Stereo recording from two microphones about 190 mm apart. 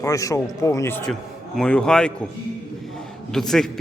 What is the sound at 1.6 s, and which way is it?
Speech, 5° left (ahead or behind).